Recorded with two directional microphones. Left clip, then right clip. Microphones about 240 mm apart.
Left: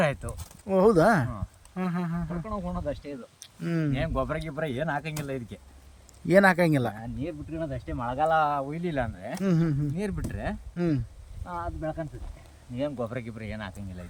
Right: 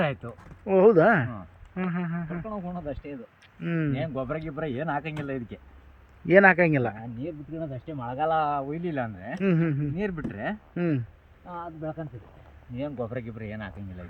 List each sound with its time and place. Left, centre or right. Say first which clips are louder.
0.0 s speech: left 2 dB; centre
12.7 s speech: left 1 dB; centre